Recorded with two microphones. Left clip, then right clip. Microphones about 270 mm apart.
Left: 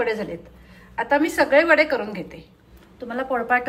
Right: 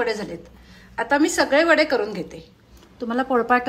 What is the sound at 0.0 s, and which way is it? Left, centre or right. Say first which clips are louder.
A woman's voice: even; centre.